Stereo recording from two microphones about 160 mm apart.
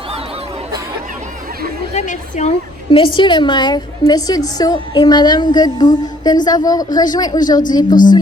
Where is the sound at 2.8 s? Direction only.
30° left (ahead or behind).